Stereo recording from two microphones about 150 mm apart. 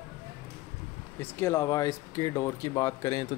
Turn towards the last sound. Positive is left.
turn(degrees=20)  # may be behind; listen again after turning